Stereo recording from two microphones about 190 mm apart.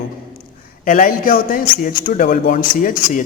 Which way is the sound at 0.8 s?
45° left (ahead or behind).